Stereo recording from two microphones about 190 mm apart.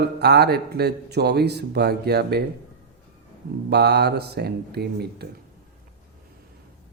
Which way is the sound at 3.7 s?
60° right (ahead or behind).